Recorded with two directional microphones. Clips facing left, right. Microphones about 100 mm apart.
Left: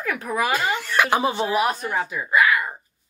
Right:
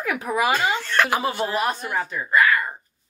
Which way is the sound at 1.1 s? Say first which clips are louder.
Left 2 dB; 20° left (ahead or behind).